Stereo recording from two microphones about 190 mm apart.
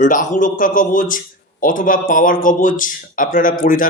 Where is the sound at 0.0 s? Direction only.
40° left (ahead or behind).